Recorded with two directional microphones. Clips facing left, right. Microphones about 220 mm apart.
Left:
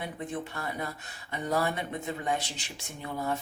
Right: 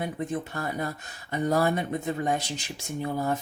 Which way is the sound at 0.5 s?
45° right (ahead or behind).